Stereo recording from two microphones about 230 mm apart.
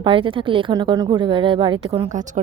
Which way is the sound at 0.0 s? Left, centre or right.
Right.